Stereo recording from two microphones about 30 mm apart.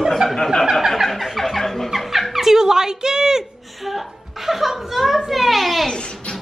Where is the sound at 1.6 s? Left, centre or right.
Centre.